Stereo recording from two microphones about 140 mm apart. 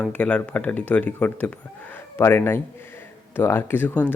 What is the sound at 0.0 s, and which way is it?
Speech, 10° left (ahead or behind).